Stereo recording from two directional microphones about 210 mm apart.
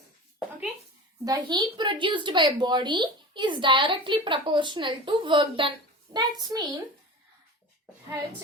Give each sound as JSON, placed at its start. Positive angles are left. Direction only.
{"t": 1.2, "sound": "speech", "side_deg": -20}